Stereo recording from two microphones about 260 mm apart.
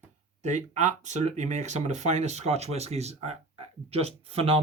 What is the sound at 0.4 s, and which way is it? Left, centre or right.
Speech, right.